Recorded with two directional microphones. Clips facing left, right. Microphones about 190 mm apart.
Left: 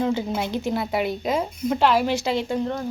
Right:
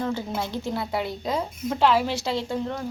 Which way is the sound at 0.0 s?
20° left (ahead or behind).